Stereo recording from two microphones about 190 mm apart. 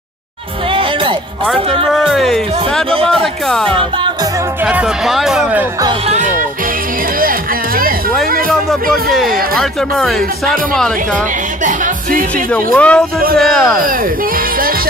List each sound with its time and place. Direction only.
1.9 s speech: centre (ahead or behind)
6.0 s music: 40° right (ahead or behind)
8.9 s music: centre (ahead or behind)
11.6 s music: 45° right (ahead or behind)
12.7 s speech: 5° left (ahead or behind)